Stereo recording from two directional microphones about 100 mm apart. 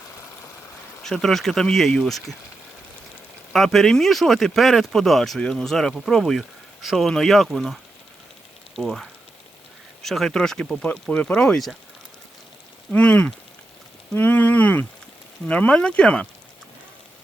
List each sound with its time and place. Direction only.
1.0 s speech: 5° left (ahead or behind)
3.5 s speech: centre (ahead or behind)
12.9 s speech: 15° left (ahead or behind)